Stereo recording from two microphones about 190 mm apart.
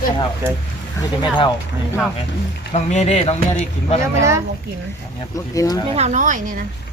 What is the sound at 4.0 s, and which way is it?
Speech, 15° right (ahead or behind).